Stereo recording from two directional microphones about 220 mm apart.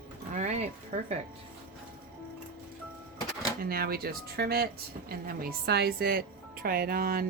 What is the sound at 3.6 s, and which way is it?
Speech, 45° right (ahead or behind).